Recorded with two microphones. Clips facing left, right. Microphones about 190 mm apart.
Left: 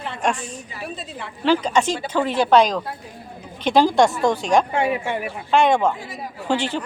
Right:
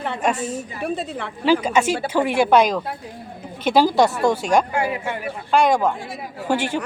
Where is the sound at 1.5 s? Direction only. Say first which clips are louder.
Right 1 dB; 10° right (ahead or behind).